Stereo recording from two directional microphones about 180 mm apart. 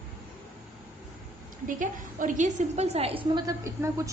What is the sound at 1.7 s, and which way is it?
A woman's voice, 45° right (ahead or behind).